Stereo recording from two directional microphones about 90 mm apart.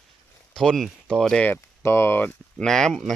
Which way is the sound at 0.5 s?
5° left (ahead or behind).